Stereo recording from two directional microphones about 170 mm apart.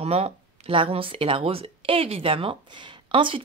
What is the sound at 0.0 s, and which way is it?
Speech, 35° right (ahead or behind).